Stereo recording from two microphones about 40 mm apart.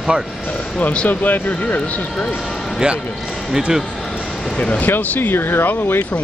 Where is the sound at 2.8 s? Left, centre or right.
Right.